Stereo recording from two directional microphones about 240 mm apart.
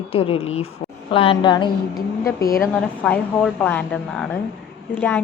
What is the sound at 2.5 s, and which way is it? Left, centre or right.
A woman's voice, centre.